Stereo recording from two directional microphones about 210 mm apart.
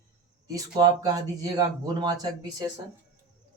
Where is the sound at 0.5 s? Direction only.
20° right (ahead or behind).